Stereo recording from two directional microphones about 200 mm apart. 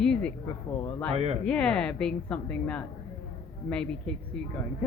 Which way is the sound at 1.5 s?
5° left (ahead or behind).